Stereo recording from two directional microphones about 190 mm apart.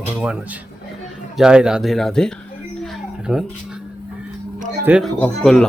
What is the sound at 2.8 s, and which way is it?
Music, centre (ahead or behind).